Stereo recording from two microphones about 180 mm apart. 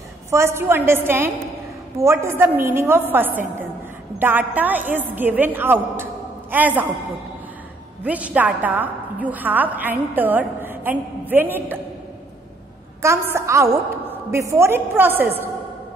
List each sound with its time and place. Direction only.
0.3 s a woman's voice: 15° right (ahead or behind)
8.0 s a woman's voice: 10° right (ahead or behind)
13.0 s a woman's voice: 15° right (ahead or behind)